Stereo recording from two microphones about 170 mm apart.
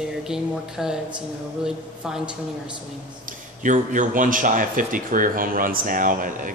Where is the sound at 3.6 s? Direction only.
50° right (ahead or behind).